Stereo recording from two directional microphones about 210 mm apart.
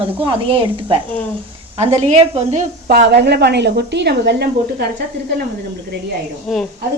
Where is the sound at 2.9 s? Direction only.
50° right (ahead or behind).